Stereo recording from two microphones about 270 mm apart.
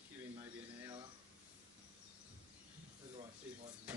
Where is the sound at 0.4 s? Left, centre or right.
Centre.